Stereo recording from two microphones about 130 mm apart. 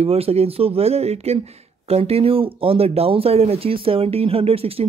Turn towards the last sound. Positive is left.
turn(degrees=-50)  # may be behind; listen again after turning